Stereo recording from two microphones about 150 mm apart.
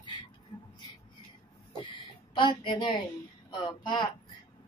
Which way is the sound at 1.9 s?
30° left (ahead or behind).